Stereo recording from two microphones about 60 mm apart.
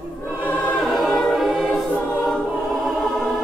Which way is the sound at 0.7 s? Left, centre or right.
Centre.